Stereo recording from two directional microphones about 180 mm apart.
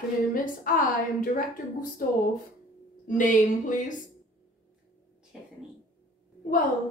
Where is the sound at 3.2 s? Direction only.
45° left (ahead or behind).